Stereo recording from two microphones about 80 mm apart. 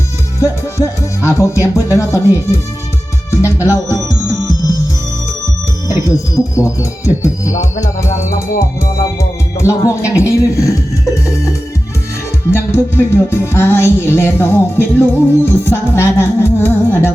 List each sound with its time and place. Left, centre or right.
0.3 s music: left
3.4 s speech: right
6.1 s speech: left
9.6 s music: left
12.5 s music: left